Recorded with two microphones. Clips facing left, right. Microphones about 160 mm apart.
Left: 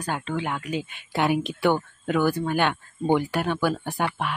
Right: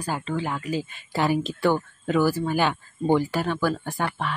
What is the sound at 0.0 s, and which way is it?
Speech, centre (ahead or behind).